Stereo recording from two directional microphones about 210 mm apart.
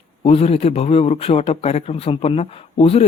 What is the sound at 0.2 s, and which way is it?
Speech, 30° left (ahead or behind).